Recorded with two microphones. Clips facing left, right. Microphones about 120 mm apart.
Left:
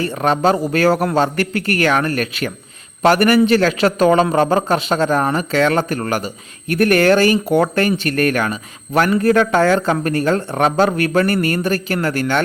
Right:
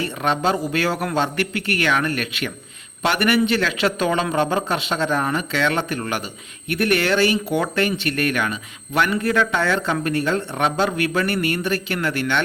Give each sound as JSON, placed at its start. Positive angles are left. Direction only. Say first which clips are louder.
{"t": 0.0, "sound": "a man's voice", "louder": "left 5 dB", "side_deg": 40}